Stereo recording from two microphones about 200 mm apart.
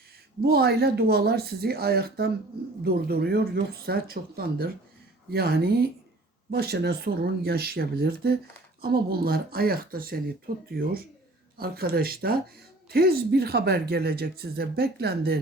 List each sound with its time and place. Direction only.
0.4 s speech: 50° right (ahead or behind)